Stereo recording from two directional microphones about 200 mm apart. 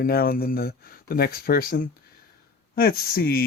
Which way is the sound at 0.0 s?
50° left (ahead or behind).